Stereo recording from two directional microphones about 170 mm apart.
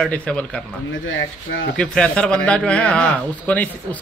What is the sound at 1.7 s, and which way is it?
A man's voice, 5° left (ahead or behind).